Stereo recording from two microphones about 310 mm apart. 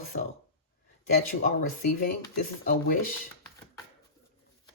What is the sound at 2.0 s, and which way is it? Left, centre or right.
Speech, left.